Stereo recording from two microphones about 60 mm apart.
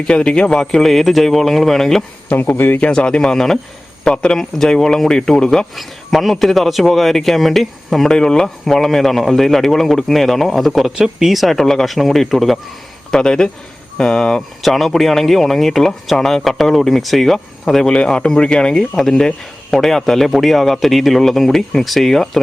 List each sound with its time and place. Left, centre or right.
0.0 s a man's voice: centre
2.3 s speech: left
2.8 s speech: centre
5.7 s a man's voice: centre
13.1 s a man's voice: centre
17.9 s a man's voice: centre